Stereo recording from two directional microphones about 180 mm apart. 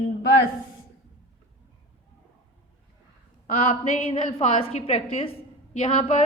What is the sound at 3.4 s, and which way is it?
A woman's voice, 40° left (ahead or behind).